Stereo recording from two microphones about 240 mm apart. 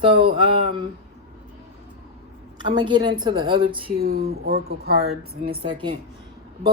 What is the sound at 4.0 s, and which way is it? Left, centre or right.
Speech, right.